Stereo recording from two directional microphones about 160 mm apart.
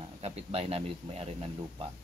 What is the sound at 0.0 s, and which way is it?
Speech, 40° right (ahead or behind).